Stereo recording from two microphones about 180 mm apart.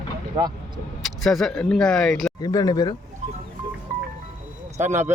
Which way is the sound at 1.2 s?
Centre (ahead or behind).